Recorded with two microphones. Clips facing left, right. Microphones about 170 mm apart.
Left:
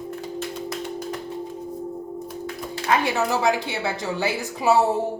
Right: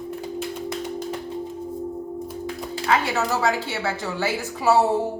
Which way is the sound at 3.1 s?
15° left (ahead or behind).